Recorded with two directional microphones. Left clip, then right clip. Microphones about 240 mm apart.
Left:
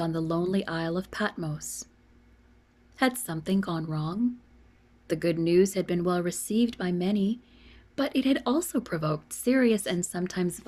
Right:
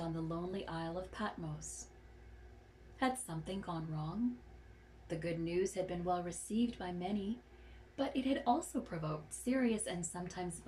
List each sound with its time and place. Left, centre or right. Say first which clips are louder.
0.0 s speech: left 13 dB; left
2.9 s speech: left 10 dB; left